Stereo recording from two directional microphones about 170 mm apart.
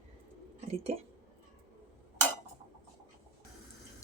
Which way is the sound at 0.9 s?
40° right (ahead or behind).